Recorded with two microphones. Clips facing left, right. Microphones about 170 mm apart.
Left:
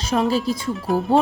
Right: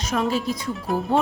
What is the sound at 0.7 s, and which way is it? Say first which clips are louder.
Speech: left 4 dB; centre (ahead or behind).